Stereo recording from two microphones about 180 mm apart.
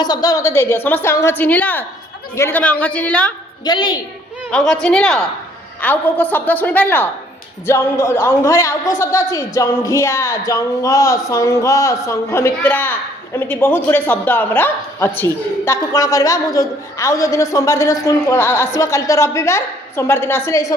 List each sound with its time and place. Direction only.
0.0 s speech: 20° left (ahead or behind)
3.6 s a woman's voice: 25° left (ahead or behind)
4.5 s a woman's voice: 5° left (ahead or behind)